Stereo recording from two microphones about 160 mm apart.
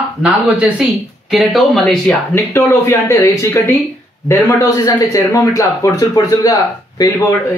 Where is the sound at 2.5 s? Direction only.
15° left (ahead or behind).